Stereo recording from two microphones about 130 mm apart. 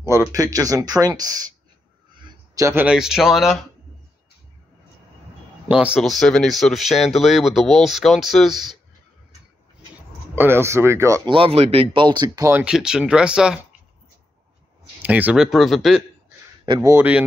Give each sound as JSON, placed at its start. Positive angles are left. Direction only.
{"t": 0.3, "sound": "speech", "side_deg": -25}
{"t": 2.5, "sound": "speech", "side_deg": -20}
{"t": 5.7, "sound": "speech", "side_deg": -10}
{"t": 10.3, "sound": "speech", "side_deg": -15}
{"t": 11.2, "sound": "speech", "side_deg": -45}
{"t": 12.6, "sound": "speech", "side_deg": -5}
{"t": 15.0, "sound": "speech", "side_deg": -10}
{"t": 16.6, "sound": "a man's voice", "side_deg": -35}
{"t": 16.9, "sound": "speech", "side_deg": -15}